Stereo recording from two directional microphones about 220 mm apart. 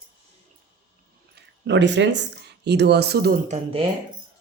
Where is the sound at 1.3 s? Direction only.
55° right (ahead or behind).